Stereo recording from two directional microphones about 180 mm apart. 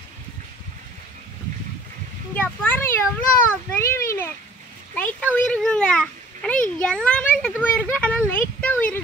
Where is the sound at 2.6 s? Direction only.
15° left (ahead or behind).